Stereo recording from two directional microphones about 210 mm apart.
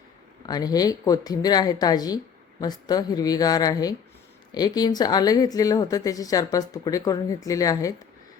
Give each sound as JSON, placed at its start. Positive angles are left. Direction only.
{"t": 0.4, "sound": "a woman's voice", "side_deg": 20}